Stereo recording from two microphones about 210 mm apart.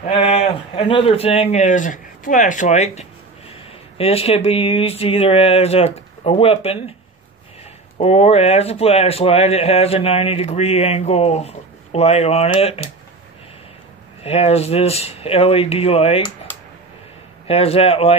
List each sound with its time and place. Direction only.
0.1 s a man's voice: 30° left (ahead or behind)
8.0 s speech: 30° left (ahead or behind)
14.2 s speech: 30° left (ahead or behind)
17.5 s speech: 30° left (ahead or behind)